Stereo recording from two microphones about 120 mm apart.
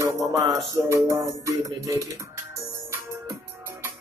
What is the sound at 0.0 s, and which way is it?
Music, 30° right (ahead or behind).